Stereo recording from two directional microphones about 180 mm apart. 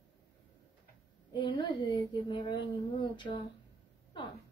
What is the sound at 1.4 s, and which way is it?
Speech, 30° left (ahead or behind).